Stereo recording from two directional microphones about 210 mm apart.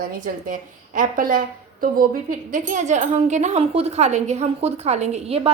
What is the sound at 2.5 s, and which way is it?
A woman's voice, 35° right (ahead or behind).